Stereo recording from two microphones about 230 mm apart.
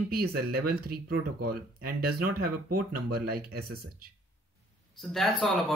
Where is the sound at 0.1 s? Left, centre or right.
Right.